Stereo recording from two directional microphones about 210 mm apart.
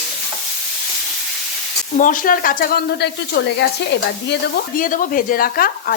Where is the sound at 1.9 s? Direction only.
40° left (ahead or behind).